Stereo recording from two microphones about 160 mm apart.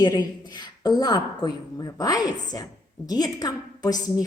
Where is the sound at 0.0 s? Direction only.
25° left (ahead or behind).